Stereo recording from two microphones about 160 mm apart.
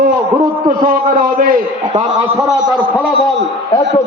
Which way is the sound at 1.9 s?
35° right (ahead or behind).